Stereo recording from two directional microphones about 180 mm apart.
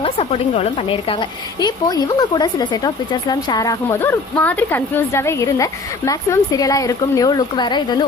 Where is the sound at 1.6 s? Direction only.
20° left (ahead or behind).